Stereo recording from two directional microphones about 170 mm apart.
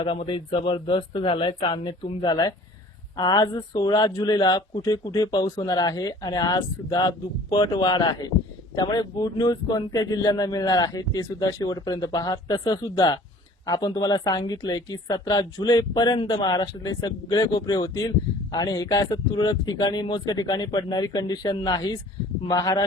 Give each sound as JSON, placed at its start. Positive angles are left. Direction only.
{"t": 0.0, "sound": "a man's voice", "side_deg": 30}